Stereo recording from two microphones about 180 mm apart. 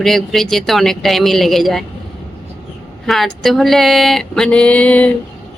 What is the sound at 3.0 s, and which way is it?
Speech, centre (ahead or behind).